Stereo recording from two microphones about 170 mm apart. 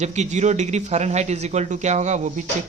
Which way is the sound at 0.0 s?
40° right (ahead or behind).